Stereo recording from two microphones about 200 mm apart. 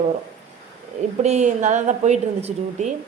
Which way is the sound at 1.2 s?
35° right (ahead or behind).